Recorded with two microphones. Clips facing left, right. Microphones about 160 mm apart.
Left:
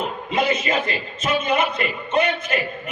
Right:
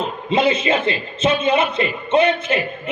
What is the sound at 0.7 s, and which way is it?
Speech, 30° right (ahead or behind).